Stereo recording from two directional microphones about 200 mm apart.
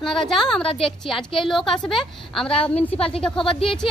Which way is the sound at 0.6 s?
25° left (ahead or behind).